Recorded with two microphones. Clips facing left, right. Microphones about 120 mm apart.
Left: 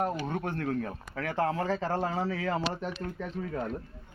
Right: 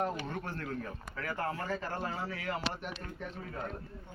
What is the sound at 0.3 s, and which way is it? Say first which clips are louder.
Speech: left 7 dB; 60° left (ahead or behind).